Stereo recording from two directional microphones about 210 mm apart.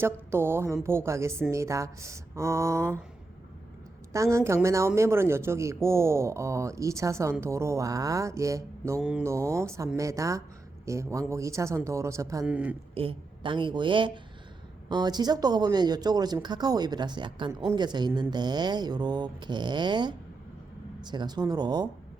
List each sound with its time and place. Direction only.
0.0 s speech: 10° right (ahead or behind)
4.1 s speech: 15° right (ahead or behind)
9.0 s speech: 5° right (ahead or behind)
12.9 s speech: 25° right (ahead or behind)